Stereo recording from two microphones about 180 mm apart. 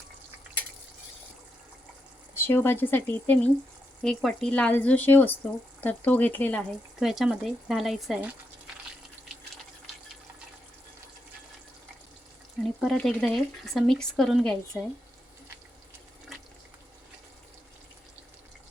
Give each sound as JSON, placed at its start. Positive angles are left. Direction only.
{"t": 2.3, "sound": "speech", "side_deg": 10}
{"t": 12.8, "sound": "speech", "side_deg": 0}